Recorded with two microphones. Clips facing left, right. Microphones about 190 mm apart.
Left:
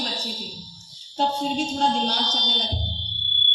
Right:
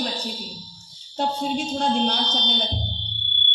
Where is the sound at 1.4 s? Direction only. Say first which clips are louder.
Left 1 dB; 55° right (ahead or behind).